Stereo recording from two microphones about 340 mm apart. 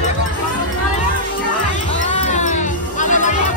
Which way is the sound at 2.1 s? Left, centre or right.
Left.